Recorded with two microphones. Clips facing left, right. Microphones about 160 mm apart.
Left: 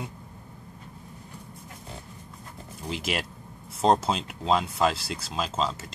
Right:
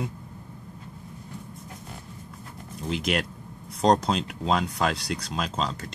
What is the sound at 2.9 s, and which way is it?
Speech, 5° left (ahead or behind).